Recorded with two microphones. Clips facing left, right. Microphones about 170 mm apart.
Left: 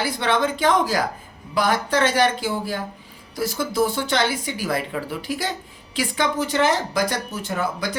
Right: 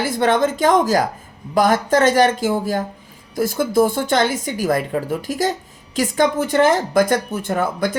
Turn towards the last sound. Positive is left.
turn(degrees=-55)  # may be behind; listen again after turning